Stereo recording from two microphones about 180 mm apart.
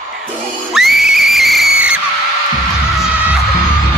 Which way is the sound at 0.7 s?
Centre (ahead or behind).